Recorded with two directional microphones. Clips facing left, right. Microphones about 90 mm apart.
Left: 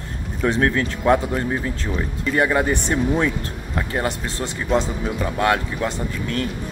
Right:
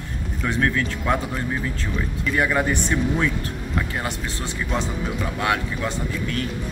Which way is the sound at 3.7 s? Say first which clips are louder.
Left 4 dB; 40° left (ahead or behind).